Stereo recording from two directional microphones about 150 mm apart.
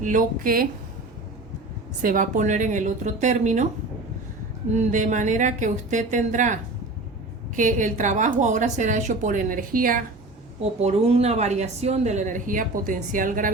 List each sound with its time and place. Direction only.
0.0 s a woman's voice: 60° right (ahead or behind)
2.0 s a woman's voice: 65° right (ahead or behind)
4.7 s a woman's voice: 55° right (ahead or behind)
10.6 s a woman's voice: 45° right (ahead or behind); by 13.5 s 65° right (ahead or behind)